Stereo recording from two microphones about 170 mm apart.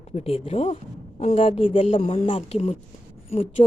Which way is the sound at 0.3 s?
35° left (ahead or behind).